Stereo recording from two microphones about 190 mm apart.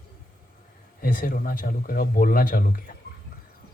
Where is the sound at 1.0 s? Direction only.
50° left (ahead or behind).